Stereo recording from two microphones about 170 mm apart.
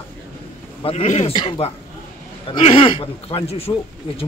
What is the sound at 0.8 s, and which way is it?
Speech, 40° left (ahead or behind).